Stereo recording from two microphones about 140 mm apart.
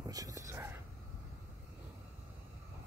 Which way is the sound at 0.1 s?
25° right (ahead or behind).